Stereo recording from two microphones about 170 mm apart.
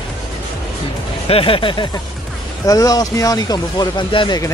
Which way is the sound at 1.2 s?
35° left (ahead or behind).